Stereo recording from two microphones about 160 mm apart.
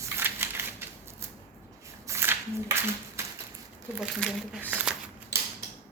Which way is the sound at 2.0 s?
15° right (ahead or behind).